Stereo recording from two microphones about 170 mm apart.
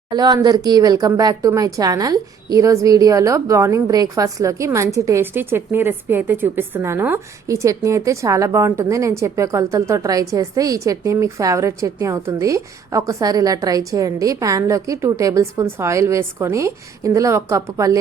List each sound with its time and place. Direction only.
0.1 s speech: 25° right (ahead or behind)